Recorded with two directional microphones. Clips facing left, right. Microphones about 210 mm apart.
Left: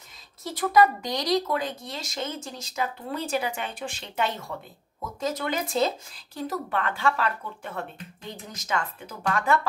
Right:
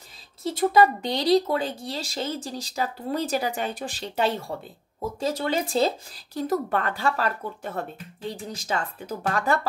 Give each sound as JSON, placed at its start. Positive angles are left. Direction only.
{"t": 0.4, "sound": "speech", "side_deg": -25}
{"t": 6.4, "sound": "speech", "side_deg": -45}